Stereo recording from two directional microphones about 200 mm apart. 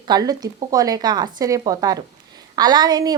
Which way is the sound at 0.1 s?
20° right (ahead or behind).